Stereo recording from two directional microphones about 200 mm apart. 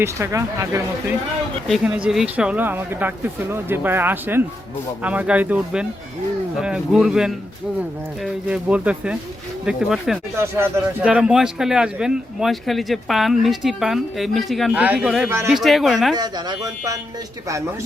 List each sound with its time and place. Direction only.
0.0 s speech: 15° right (ahead or behind)
1.6 s speech: centre (ahead or behind)
16.1 s speech: 20° right (ahead or behind)